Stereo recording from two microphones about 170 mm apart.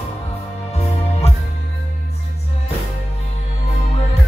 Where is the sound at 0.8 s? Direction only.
40° left (ahead or behind).